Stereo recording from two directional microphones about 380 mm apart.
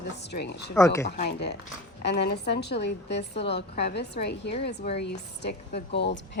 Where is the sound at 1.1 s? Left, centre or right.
Left.